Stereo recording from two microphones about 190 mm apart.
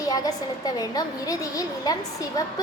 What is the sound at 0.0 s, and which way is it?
A woman's voice, 20° left (ahead or behind).